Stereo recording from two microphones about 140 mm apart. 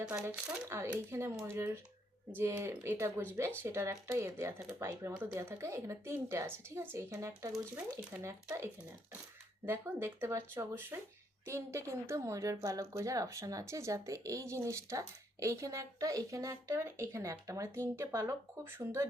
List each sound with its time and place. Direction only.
0.0 s speech: 5° right (ahead or behind)
1.1 s speech: 20° right (ahead or behind)